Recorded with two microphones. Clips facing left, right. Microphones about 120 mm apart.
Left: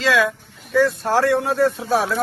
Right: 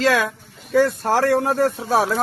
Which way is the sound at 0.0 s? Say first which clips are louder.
Even; 40° right (ahead or behind).